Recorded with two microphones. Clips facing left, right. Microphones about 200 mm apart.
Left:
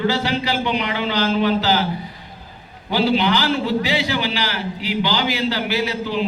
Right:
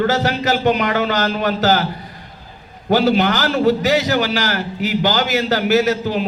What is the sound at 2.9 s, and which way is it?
A man's voice, 45° right (ahead or behind).